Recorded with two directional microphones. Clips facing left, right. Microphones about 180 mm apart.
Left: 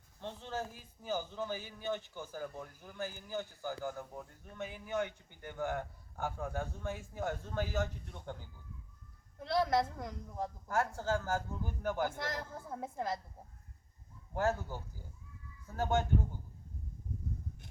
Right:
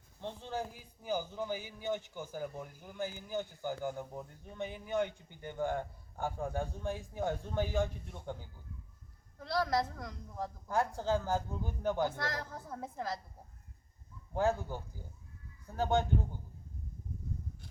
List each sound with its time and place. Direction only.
0.2 s a man's voice: 15° right (ahead or behind)
9.4 s a woman's voice: 20° left (ahead or behind)
10.7 s a man's voice: 15° right (ahead or behind)
12.6 s a woman's voice: 20° left (ahead or behind)
14.3 s a man's voice: 15° right (ahead or behind)